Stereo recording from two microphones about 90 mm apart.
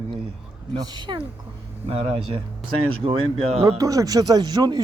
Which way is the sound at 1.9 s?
90° right.